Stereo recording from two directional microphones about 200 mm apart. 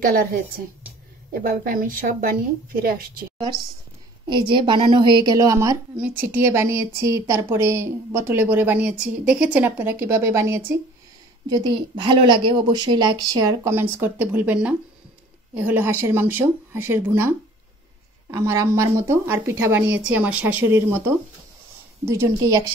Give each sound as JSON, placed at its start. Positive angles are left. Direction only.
{"t": 0.0, "sound": "a woman's voice", "side_deg": -45}
{"t": 4.3, "sound": "a woman's voice", "side_deg": -25}